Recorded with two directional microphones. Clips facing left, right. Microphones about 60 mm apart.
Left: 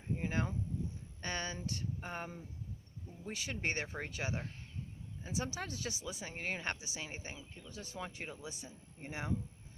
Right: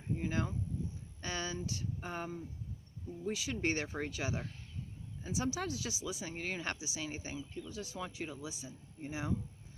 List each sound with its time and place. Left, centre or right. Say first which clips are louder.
0.2 s a sound: right 1 dB; left
1.2 s speech: right 1 dB; left
2.0 s speech: right 2 dB; left
3.6 s speech: right 2 dB; left